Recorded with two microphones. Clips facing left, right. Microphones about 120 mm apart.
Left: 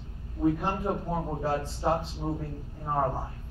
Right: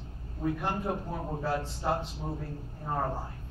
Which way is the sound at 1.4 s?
20° left (ahead or behind).